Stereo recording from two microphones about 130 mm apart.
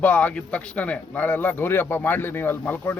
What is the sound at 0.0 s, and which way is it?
A man's voice, 10° left (ahead or behind).